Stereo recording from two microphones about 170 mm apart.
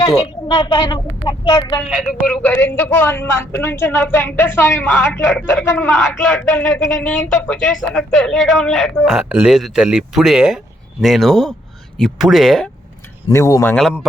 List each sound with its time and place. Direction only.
0.0 s speech: 35° left (ahead or behind)
1.9 s speech: 5° right (ahead or behind)
2.2 s a woman's voice: 10° left (ahead or behind)
13.2 s a woman's voice: 20° left (ahead or behind)